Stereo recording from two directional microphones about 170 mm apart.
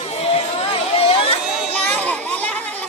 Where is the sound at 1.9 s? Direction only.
5° left (ahead or behind).